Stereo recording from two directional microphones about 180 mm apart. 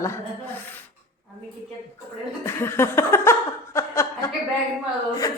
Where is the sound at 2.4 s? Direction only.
15° left (ahead or behind).